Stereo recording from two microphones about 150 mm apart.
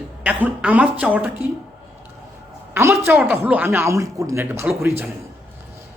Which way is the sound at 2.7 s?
15° right (ahead or behind).